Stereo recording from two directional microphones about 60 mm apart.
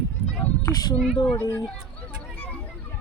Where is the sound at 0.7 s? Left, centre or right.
Left.